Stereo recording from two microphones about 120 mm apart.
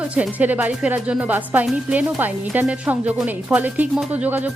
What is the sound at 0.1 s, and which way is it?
Speech, 10° right (ahead or behind).